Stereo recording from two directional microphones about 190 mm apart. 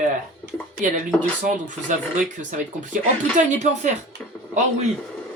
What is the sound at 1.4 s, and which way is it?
Speech, 40° right (ahead or behind).